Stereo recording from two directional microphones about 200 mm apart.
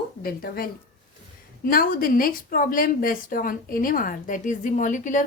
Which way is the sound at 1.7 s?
45° left (ahead or behind).